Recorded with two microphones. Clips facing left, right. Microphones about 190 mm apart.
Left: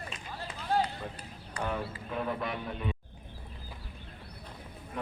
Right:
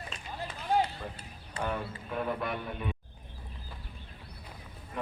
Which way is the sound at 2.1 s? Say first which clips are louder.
Right 1 dB; centre (ahead or behind).